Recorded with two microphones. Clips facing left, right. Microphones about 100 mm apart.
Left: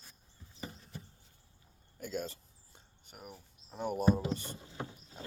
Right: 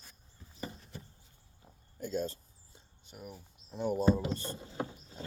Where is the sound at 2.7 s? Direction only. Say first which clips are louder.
Right 3 dB; 55° left (ahead or behind).